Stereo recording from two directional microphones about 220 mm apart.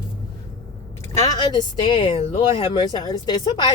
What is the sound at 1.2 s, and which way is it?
A woman's voice, 20° left (ahead or behind).